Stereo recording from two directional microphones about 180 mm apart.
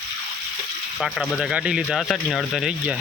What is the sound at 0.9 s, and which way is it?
Speech, centre (ahead or behind).